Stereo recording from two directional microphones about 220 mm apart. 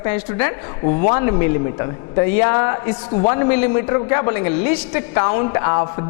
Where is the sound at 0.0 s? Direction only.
15° left (ahead or behind).